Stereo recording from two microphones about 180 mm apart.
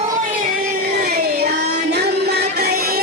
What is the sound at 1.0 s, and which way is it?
Music, 60° right (ahead or behind).